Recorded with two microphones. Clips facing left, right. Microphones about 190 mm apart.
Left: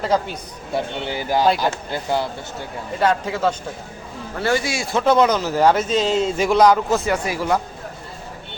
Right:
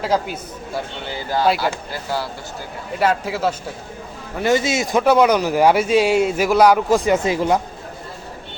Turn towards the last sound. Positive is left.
turn(degrees=-20)  # may be behind; listen again after turning